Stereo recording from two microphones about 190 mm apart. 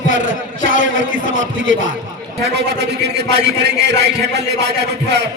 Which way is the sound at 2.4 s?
60° right (ahead or behind).